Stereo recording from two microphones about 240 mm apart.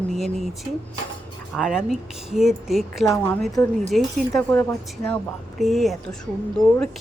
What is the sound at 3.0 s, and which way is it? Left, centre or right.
Speech, centre.